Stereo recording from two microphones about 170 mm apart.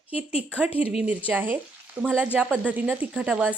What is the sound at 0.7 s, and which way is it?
Speech, 35° left (ahead or behind).